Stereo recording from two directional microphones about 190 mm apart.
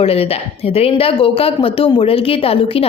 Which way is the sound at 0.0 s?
30° left (ahead or behind).